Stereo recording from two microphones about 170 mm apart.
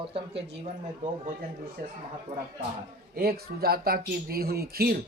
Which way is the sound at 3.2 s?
65° right (ahead or behind).